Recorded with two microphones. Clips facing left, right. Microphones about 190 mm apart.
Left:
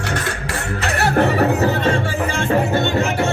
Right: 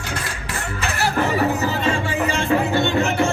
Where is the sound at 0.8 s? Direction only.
60° left (ahead or behind).